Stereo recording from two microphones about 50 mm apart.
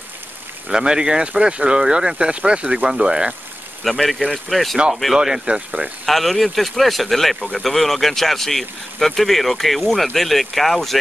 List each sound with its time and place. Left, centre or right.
0.7 s speech: centre
3.8 s speech: centre
5.1 s speech: centre
6.0 s speech: centre